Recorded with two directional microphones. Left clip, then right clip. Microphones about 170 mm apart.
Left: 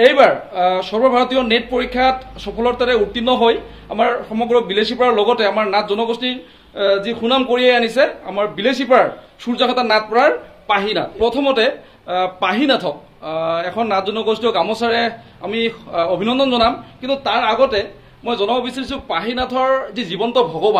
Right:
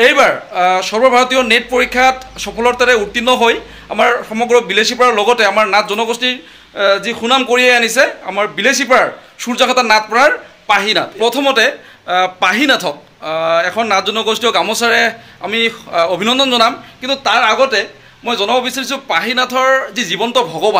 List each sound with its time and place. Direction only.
0.0 s speech: 20° right (ahead or behind)
18.2 s speech: 20° right (ahead or behind)